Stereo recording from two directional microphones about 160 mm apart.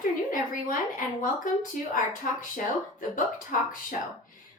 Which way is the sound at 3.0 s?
55° left (ahead or behind).